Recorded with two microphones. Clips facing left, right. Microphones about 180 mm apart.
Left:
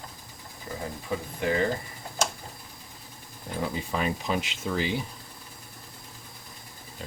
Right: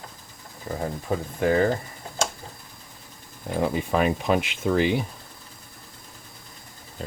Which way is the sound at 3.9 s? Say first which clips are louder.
Right 6 dB; 60° right (ahead or behind).